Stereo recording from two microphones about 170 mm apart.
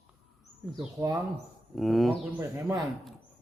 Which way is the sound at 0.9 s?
20° right (ahead or behind).